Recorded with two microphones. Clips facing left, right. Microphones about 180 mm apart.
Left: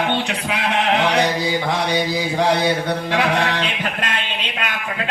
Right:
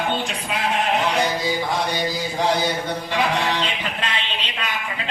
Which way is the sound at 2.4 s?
65° left (ahead or behind).